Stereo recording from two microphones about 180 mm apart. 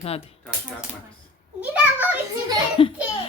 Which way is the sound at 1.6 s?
10° right (ahead or behind).